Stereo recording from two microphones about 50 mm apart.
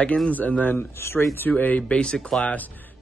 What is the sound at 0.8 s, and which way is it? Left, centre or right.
Speech, left.